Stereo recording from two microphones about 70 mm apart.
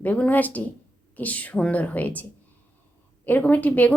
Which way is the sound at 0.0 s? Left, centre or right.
Left.